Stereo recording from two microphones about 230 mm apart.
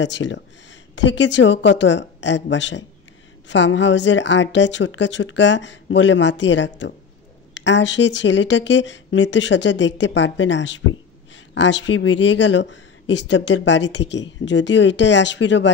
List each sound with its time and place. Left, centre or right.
0.0 s speech: left